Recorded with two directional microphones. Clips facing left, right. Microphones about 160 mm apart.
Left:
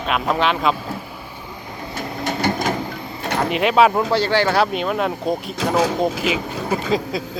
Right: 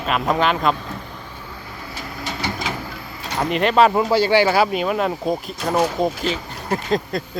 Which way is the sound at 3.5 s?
Centre (ahead or behind).